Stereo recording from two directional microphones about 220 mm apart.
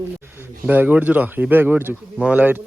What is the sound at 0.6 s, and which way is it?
Speech, 10° right (ahead or behind).